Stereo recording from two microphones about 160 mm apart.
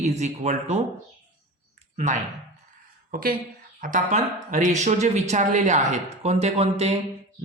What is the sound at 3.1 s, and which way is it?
Speech, 65° right (ahead or behind).